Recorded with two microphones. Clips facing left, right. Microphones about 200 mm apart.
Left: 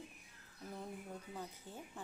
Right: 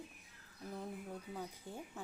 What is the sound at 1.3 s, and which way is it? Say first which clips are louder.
Speech: right 2 dB; 10° right (ahead or behind).